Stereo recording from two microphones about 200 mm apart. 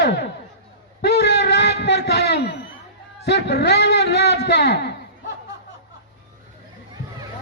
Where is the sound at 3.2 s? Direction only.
55° left (ahead or behind).